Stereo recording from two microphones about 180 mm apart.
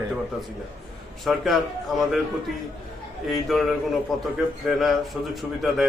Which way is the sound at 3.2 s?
Centre (ahead or behind).